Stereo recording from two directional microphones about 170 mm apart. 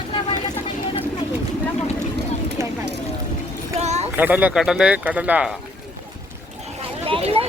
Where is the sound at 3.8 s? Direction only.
40° right (ahead or behind).